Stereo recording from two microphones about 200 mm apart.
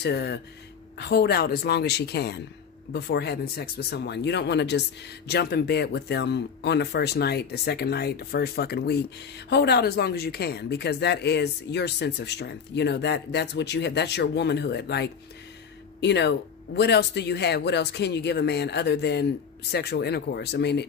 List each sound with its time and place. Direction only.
0.0 s speech: 55° left (ahead or behind)